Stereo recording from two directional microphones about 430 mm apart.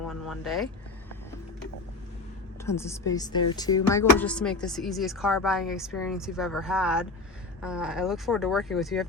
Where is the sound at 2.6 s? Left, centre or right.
Centre.